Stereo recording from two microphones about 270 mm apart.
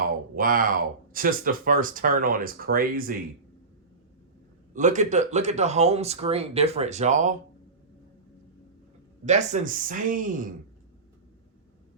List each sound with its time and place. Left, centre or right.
0.3 s speech: right
4.7 s speech: right
9.2 s speech: right